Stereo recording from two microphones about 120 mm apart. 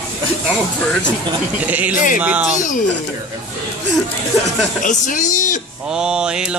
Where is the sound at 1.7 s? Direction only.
15° right (ahead or behind).